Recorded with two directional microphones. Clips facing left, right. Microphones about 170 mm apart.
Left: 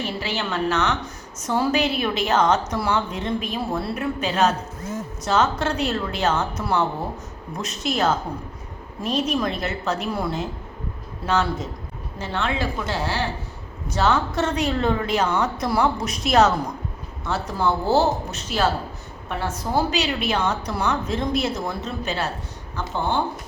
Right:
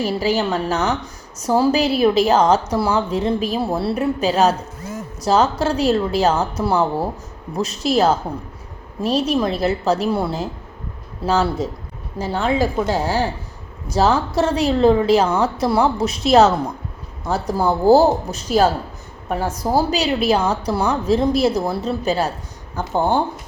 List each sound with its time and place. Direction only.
0.0 s a woman's voice: 40° right (ahead or behind)